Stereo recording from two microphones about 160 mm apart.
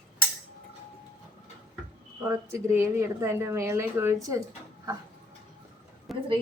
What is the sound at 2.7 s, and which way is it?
Speech, 15° right (ahead or behind).